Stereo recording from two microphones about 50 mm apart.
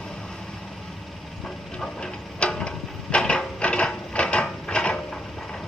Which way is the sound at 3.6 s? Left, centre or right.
Left.